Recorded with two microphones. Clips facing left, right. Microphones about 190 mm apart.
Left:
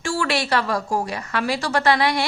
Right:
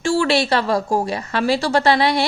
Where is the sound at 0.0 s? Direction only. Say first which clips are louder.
Right 6 dB; 25° right (ahead or behind).